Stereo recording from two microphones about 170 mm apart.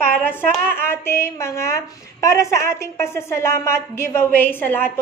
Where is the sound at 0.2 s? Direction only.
10° left (ahead or behind).